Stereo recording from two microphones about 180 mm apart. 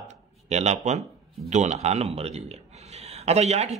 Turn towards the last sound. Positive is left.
turn(degrees=-35)  # may be behind; listen again after turning